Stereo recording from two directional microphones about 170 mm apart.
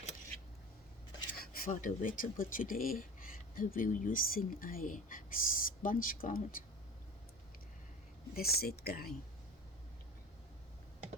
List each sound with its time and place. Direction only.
1.4 s speech: 60° left (ahead or behind)
8.4 s speech: 65° left (ahead or behind)